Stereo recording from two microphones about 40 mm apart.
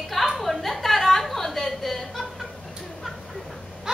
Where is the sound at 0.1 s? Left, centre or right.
Centre.